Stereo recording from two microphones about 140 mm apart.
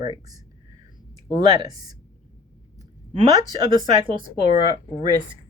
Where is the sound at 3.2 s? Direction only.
30° right (ahead or behind).